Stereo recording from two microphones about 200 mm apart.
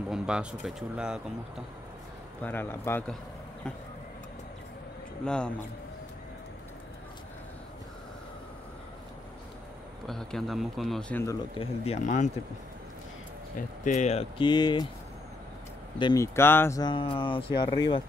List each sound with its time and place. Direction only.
0.1 s speech: 5° right (ahead or behind)
2.4 s a man's voice: 10° left (ahead or behind)
5.2 s speech: 5° left (ahead or behind)
10.0 s speech: centre (ahead or behind)
11.6 s speech: 30° left (ahead or behind)
13.6 s speech: 40° left (ahead or behind); by 14.9 s 20° left (ahead or behind)
16.0 s speech: 20° left (ahead or behind)